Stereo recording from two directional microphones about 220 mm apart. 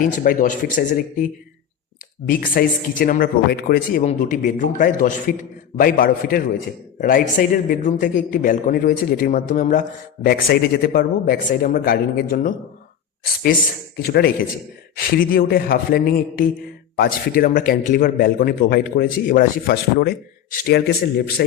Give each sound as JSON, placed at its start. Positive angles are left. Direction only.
{"t": 0.2, "sound": "a man's voice", "side_deg": 35}
{"t": 2.2, "sound": "a man's voice", "side_deg": 40}
{"t": 13.9, "sound": "a man's voice", "side_deg": 45}